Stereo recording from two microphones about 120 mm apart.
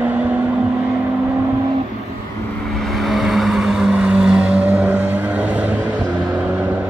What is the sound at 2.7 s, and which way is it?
Vehicle, centre (ahead or behind).